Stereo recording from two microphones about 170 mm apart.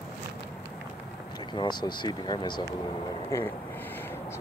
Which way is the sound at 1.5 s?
25° left (ahead or behind).